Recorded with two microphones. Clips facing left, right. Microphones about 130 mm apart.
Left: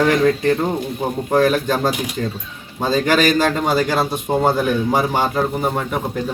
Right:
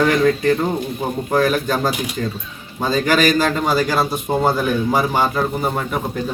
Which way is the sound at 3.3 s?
25° left (ahead or behind).